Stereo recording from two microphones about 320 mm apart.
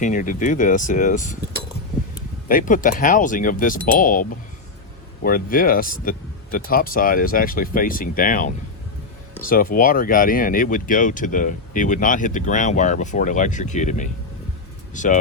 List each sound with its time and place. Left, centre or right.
0.0 s speech: left
2.5 s speech: left